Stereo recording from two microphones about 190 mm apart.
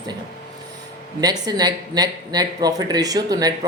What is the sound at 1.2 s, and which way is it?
Speech, 20° right (ahead or behind).